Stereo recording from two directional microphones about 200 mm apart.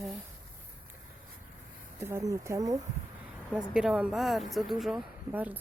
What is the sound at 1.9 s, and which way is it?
Speech, 15° right (ahead or behind).